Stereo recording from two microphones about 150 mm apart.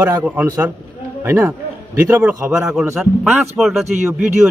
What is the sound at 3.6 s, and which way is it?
Speech, centre (ahead or behind).